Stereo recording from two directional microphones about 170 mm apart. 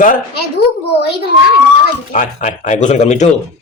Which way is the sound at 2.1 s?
45° left (ahead or behind).